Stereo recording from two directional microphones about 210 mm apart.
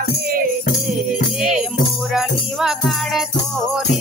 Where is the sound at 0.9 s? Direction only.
Centre (ahead or behind).